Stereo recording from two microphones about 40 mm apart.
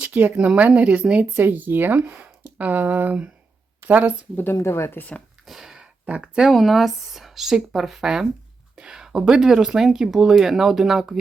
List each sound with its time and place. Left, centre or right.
0.0 s a sound: right
0.4 s speech: right
1.4 s speech: right
2.4 s speech: right
4.4 s speech: left
5.5 s a sound: centre
6.1 s speech: right
6.5 s speech: centre